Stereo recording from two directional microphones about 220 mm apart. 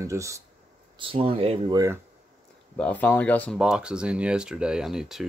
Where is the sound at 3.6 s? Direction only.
5° right (ahead or behind).